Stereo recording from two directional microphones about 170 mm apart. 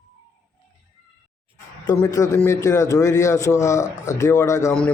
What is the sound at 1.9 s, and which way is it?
A man's voice, 20° left (ahead or behind).